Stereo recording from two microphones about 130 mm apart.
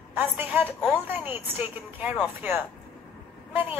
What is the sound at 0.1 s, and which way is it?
A woman's voice, 15° right (ahead or behind).